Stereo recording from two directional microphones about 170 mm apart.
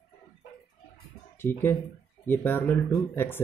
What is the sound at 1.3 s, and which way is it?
Speech, 15° left (ahead or behind).